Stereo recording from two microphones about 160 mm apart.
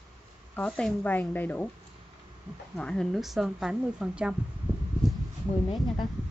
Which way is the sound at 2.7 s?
5° left (ahead or behind).